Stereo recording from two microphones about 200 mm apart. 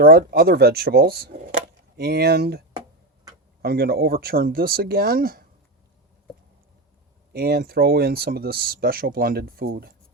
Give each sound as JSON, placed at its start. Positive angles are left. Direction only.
{"t": 0.0, "sound": "speech", "side_deg": -50}
{"t": 3.6, "sound": "speech", "side_deg": -50}
{"t": 7.3, "sound": "speech", "side_deg": -50}